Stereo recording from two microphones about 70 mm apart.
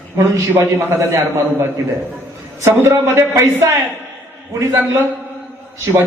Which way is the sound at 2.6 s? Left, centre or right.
Right.